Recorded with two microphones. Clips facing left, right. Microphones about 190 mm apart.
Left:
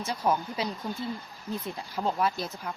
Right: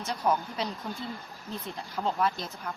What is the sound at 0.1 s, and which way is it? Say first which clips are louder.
Speech: even; 5° left (ahead or behind).